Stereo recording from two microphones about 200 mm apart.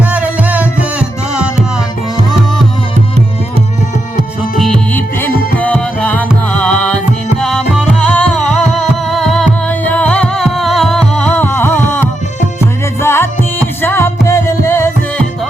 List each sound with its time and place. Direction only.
0.0 s music: 5° right (ahead or behind)
4.5 s music: 5° left (ahead or behind)
5.3 s music: 45° left (ahead or behind)
5.5 s music: 5° left (ahead or behind)